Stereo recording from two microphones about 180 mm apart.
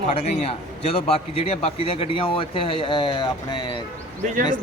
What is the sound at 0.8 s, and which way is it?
A man's voice, 35° left (ahead or behind).